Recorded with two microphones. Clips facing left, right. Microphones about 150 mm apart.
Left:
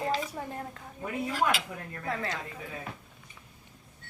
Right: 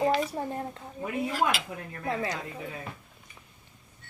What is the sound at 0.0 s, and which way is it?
Speech, 25° right (ahead or behind).